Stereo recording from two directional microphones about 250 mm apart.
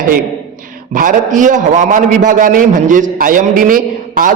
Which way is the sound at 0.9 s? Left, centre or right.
Right.